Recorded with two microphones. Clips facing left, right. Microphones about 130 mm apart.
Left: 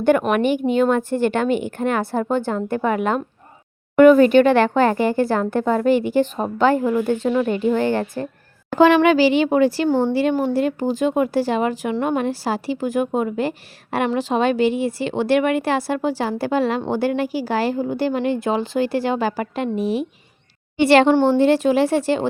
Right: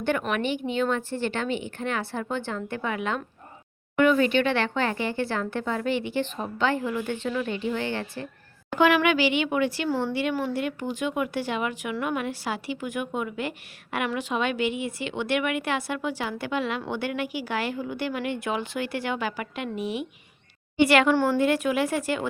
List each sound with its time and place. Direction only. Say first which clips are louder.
0.0 s speech: left 9 dB; 45° left (ahead or behind)
8.7 s speech: left 7 dB; 35° left (ahead or behind)